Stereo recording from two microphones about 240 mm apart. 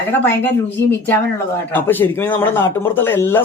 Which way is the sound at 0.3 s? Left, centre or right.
Centre.